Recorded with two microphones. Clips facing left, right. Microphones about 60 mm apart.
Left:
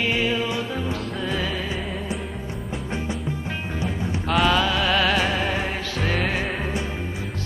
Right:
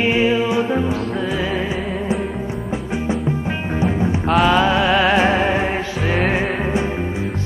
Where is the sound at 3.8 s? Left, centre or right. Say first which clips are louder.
Right 10 dB; right.